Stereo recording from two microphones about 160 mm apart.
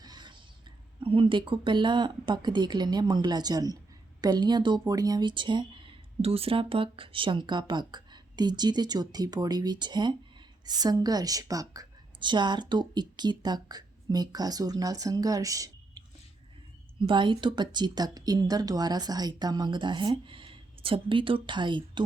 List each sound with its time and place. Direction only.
0.0 s a sound: 25° right (ahead or behind)
0.9 s speech: 35° right (ahead or behind)
17.1 s speech: 30° right (ahead or behind)